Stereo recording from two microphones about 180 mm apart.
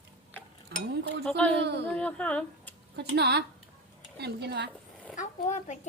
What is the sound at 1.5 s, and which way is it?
Speech, 70° right (ahead or behind).